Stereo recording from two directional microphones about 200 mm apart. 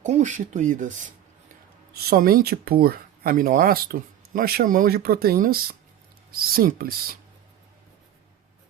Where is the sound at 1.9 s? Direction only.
45° right (ahead or behind).